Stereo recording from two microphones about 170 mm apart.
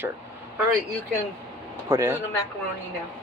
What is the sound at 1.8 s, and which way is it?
Speech, 15° right (ahead or behind).